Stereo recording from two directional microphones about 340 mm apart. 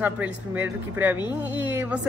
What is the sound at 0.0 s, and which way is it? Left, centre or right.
Speech, centre.